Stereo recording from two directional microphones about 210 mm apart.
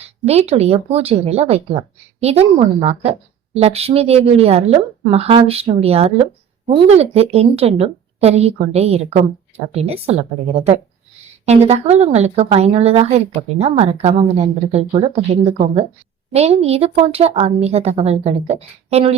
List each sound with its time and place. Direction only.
0.0 s a woman's voice: 30° right (ahead or behind)